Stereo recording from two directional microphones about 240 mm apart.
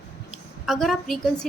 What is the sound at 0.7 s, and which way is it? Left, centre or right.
Speech, centre.